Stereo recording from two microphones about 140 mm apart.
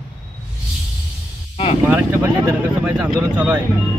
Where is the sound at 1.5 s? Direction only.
45° left (ahead or behind).